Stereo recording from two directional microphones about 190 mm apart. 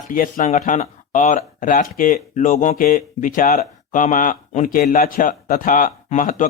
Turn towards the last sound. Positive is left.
turn(degrees=40)  # may be behind; listen again after turning